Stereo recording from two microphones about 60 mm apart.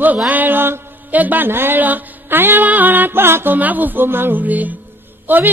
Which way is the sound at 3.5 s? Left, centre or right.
Right.